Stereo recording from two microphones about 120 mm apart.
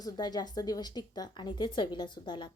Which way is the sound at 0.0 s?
35° left (ahead or behind).